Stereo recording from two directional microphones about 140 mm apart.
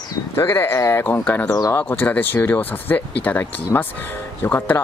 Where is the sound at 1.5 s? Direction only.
25° left (ahead or behind).